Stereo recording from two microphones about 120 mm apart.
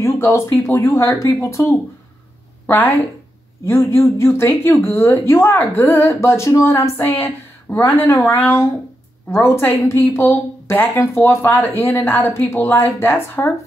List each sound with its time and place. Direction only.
0.0 s speech: 25° left (ahead or behind)